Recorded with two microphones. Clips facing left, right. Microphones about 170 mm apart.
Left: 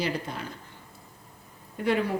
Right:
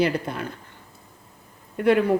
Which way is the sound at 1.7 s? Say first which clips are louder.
Right 7 dB; 60° right (ahead or behind).